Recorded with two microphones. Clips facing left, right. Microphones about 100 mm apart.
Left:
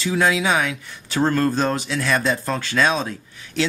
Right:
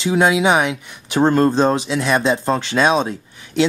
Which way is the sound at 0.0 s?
25° right (ahead or behind).